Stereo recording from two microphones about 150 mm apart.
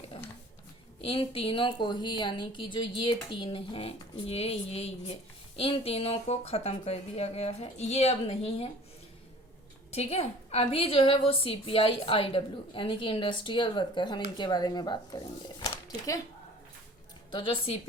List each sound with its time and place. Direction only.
1.0 s a woman's voice: 40° left (ahead or behind)
9.9 s a woman's voice: 45° left (ahead or behind); by 15.2 s 25° left (ahead or behind)
15.6 s a sound: 25° left (ahead or behind)
17.3 s a woman's voice: 35° left (ahead or behind)